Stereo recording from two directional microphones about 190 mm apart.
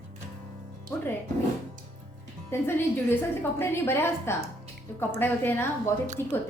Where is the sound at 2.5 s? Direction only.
10° left (ahead or behind).